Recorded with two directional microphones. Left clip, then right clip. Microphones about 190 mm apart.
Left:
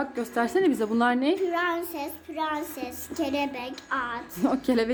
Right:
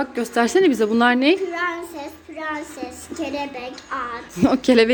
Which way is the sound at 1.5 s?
45° left (ahead or behind).